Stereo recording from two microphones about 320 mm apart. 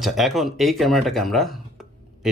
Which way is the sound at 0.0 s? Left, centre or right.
Centre.